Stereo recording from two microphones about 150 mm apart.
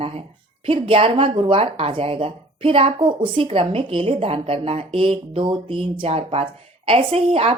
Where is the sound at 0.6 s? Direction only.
35° right (ahead or behind).